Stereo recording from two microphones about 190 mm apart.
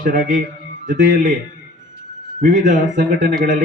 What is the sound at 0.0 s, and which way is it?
Speech, 45° right (ahead or behind).